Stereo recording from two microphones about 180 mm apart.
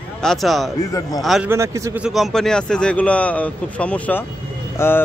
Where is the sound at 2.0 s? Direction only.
Centre (ahead or behind).